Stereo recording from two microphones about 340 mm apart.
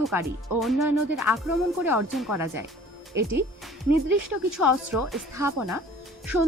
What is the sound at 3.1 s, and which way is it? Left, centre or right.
Speech, right.